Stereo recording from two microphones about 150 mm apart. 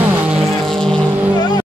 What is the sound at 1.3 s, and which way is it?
Music, 25° left (ahead or behind).